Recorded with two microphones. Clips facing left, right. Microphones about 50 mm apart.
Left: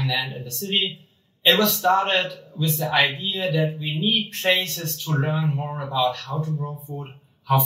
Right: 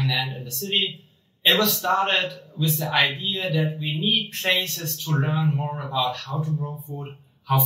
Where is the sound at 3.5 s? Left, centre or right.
Left.